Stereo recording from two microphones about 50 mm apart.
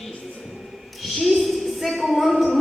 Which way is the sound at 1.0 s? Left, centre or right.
Centre.